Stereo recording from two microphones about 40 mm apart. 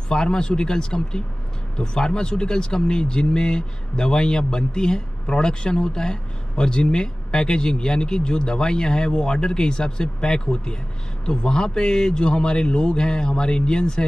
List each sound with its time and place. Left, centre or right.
0.1 s speech: centre